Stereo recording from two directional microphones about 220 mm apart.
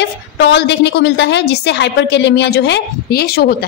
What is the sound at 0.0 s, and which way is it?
A woman's voice, 50° left (ahead or behind).